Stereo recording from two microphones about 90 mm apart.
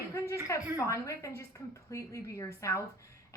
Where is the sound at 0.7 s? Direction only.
35° left (ahead or behind).